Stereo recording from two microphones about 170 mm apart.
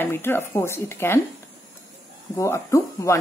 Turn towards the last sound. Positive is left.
turn(degrees=15)  # may be behind; listen again after turning